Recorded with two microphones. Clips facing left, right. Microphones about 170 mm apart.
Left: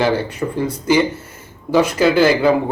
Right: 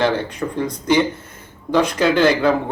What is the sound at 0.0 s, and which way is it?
Speech, 5° left (ahead or behind).